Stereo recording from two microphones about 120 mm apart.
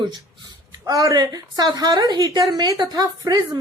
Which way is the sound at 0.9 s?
30° right (ahead or behind).